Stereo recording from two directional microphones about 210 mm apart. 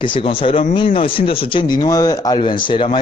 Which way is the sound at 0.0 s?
25° left (ahead or behind).